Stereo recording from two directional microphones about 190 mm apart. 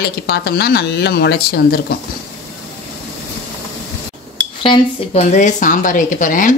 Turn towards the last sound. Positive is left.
turn(degrees=45)  # may be behind; listen again after turning